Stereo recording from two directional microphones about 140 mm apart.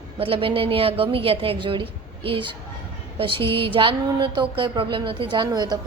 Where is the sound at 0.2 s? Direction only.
40° right (ahead or behind).